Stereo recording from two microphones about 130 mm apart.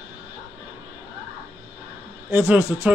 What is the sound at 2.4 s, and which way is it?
Speech, 10° right (ahead or behind).